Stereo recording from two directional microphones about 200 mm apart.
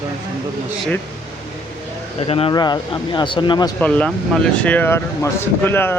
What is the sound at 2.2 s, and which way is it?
Speech, 30° left (ahead or behind).